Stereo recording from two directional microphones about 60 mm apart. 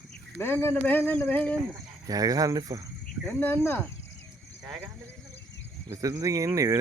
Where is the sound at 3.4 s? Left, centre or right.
Left.